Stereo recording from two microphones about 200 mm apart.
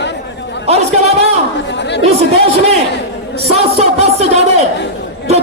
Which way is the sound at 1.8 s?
60° left (ahead or behind).